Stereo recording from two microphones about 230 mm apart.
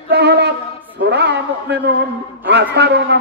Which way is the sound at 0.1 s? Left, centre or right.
Right.